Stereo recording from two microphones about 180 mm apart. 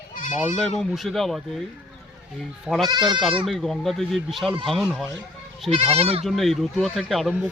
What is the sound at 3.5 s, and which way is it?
Speech, centre (ahead or behind).